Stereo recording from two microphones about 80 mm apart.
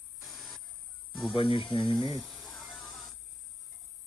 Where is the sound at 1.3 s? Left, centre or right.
Left.